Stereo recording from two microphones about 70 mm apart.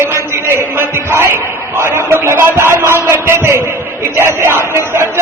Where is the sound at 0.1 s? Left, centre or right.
Right.